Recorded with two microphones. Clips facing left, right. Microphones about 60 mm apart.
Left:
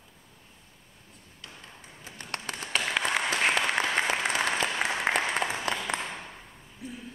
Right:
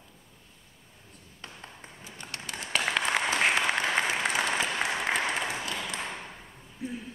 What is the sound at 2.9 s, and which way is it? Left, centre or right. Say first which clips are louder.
Applause: even; centre.